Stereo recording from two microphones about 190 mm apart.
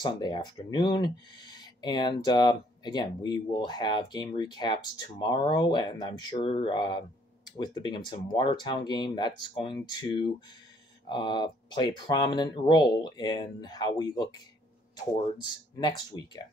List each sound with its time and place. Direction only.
0.0 s speech: 25° left (ahead or behind)